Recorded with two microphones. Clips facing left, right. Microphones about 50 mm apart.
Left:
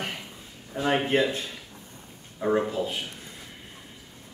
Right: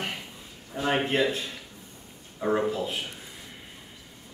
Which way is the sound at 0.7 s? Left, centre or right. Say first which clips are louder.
Left 2 dB; centre.